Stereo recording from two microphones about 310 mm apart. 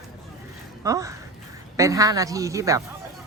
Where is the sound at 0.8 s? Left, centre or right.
Centre.